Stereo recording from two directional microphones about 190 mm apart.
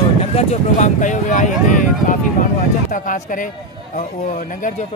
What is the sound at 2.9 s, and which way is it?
Speech, 45° left (ahead or behind).